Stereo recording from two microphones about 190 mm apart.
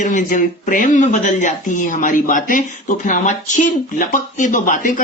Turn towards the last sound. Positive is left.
turn(degrees=45)  # may be behind; listen again after turning